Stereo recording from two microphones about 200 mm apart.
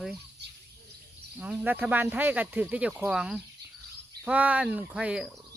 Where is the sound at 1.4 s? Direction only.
10° right (ahead or behind).